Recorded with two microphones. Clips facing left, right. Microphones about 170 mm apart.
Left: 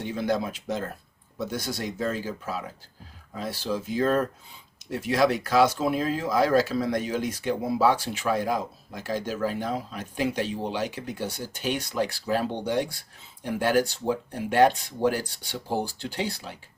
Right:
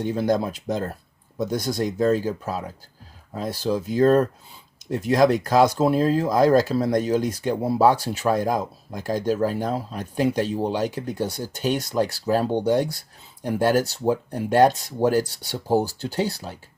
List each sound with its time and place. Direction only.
0.0 s speech: 40° right (ahead or behind)